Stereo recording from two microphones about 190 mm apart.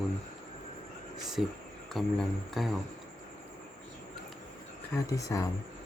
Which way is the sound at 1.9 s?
Centre (ahead or behind).